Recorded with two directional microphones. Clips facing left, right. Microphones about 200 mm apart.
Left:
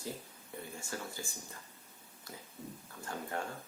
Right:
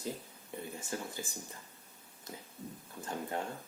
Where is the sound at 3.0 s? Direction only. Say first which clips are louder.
Right 2 dB; 20° right (ahead or behind).